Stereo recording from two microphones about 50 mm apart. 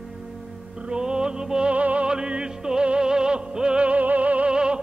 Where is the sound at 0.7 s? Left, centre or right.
Centre.